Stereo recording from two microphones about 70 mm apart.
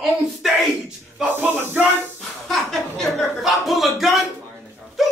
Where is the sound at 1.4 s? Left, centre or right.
Right.